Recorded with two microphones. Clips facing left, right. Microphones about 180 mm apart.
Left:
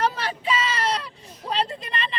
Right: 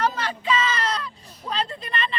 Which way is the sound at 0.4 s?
30° left (ahead or behind).